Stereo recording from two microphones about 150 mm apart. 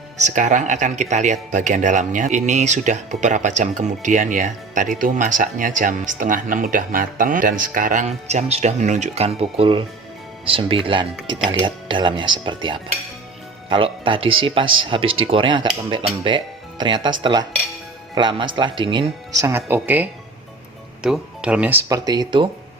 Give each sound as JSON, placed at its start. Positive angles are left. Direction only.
{"t": 0.2, "sound": "speech", "side_deg": -55}